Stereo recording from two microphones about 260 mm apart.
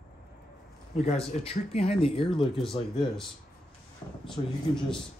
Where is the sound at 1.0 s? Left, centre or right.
Left.